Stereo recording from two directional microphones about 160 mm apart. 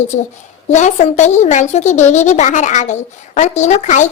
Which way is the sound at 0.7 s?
45° left (ahead or behind).